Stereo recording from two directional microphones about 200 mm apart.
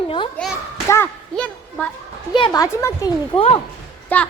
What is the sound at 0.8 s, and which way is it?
Speech, 10° left (ahead or behind).